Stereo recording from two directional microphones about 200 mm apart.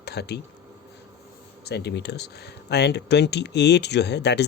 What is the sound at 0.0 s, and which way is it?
Speech, 55° left (ahead or behind).